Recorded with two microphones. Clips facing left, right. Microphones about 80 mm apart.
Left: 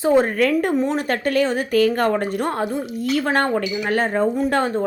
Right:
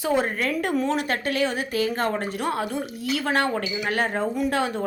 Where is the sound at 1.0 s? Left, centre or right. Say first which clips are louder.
Left 5 dB; left.